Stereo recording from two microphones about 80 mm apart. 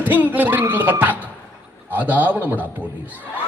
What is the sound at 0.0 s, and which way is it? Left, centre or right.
A man's voice, right.